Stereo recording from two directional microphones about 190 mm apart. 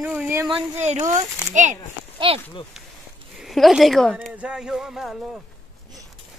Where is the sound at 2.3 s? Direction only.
30° right (ahead or behind).